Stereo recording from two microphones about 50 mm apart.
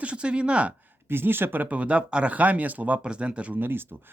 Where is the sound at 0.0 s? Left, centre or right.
Right.